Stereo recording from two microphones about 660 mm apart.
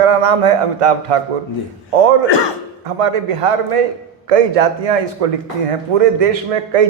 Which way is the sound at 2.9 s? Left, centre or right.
Right.